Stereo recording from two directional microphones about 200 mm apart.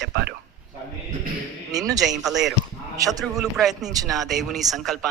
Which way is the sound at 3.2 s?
Centre (ahead or behind).